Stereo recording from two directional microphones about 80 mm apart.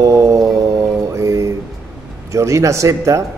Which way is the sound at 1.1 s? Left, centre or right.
Right.